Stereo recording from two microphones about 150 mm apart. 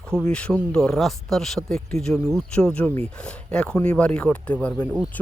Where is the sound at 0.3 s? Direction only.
10° left (ahead or behind).